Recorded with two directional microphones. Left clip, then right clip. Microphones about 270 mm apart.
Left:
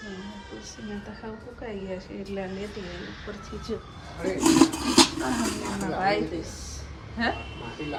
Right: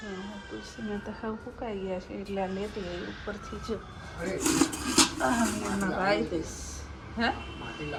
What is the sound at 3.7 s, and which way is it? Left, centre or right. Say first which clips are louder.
Speech: left 2 dB; centre.